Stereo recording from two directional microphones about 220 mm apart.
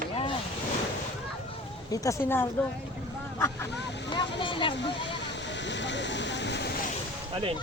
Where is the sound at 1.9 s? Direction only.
15° left (ahead or behind).